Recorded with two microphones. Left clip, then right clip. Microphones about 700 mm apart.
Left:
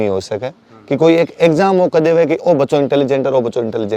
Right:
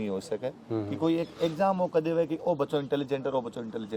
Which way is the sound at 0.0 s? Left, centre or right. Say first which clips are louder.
Left 15 dB; left.